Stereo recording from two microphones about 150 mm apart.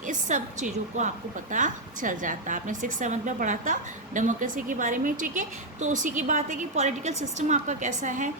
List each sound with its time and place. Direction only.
0.1 s a woman's voice: 55° right (ahead or behind)